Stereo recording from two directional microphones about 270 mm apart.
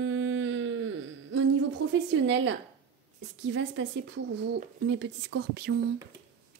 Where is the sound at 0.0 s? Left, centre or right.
Right.